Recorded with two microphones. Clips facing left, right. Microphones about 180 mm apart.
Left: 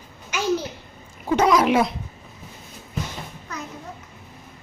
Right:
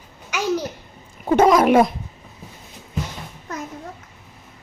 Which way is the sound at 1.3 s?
50° right (ahead or behind).